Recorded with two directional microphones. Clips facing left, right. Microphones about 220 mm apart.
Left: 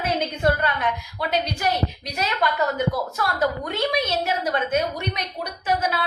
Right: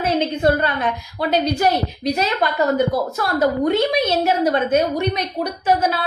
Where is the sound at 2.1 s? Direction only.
25° right (ahead or behind).